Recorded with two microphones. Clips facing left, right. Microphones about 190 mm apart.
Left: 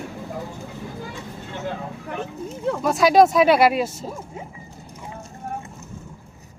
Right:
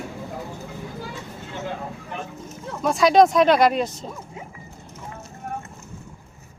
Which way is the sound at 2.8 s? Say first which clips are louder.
Even; centre (ahead or behind).